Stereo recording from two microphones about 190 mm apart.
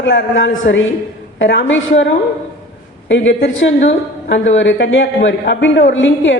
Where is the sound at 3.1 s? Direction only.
75° left (ahead or behind).